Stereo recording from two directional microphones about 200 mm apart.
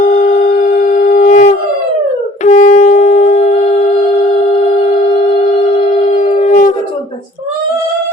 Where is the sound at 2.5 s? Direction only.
40° left (ahead or behind).